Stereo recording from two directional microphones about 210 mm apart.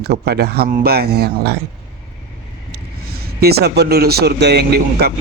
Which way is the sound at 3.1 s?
45° right (ahead or behind).